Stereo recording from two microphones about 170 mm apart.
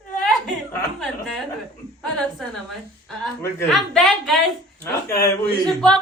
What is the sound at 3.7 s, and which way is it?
Speech, centre (ahead or behind).